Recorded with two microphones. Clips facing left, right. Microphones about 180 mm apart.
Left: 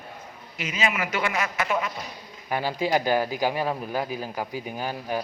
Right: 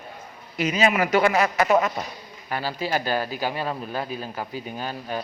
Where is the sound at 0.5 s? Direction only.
40° right (ahead or behind).